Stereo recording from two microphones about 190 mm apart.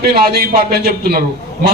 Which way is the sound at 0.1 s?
55° right (ahead or behind).